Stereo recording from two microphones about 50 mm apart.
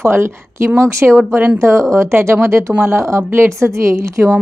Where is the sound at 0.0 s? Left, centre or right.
Right.